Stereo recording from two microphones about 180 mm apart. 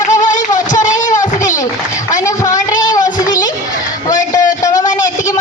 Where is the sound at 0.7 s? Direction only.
45° left (ahead or behind).